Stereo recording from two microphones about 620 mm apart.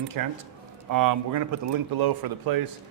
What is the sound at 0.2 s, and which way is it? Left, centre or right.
Speech, right.